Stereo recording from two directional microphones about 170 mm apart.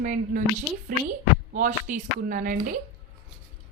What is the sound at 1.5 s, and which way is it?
Speech, 50° right (ahead or behind).